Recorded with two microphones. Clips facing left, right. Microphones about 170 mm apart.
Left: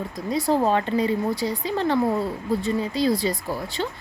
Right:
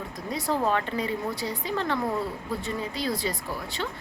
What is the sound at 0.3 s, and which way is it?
A woman's voice, 35° left (ahead or behind).